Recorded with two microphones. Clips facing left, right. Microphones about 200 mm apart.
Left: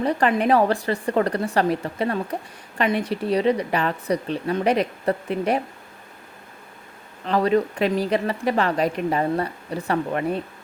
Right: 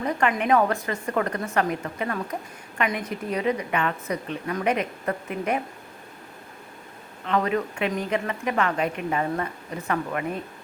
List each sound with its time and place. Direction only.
0.0 s speech: 35° left (ahead or behind)
7.3 s speech: 35° left (ahead or behind)